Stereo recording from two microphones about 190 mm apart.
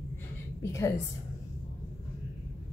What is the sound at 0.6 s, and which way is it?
Speech, 15° left (ahead or behind).